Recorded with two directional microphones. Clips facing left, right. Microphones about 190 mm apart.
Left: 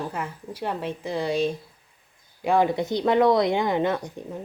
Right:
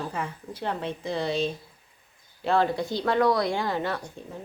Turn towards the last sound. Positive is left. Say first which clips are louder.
# left 6 dB
turn(degrees=20)  # may be behind; listen again after turning